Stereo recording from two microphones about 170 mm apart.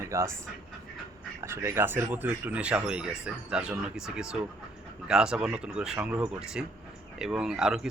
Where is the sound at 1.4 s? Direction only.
15° right (ahead or behind).